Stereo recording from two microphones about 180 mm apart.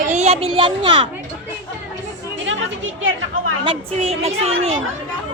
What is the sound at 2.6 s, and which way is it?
Speech, 90° right.